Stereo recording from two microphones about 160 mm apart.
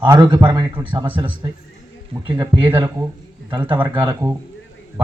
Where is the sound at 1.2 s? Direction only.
30° right (ahead or behind).